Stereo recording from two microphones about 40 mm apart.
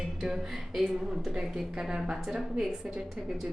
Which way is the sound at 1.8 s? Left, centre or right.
Centre.